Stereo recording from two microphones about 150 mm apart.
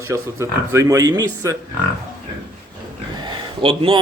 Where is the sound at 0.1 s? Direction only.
20° right (ahead or behind).